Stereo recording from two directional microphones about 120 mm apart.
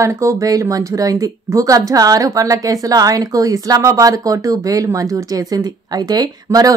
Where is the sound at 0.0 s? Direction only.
25° right (ahead or behind).